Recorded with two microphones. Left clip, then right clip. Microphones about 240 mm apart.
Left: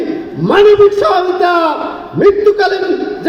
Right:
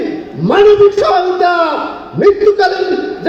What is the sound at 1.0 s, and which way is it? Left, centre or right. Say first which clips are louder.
A man's voice: even; left.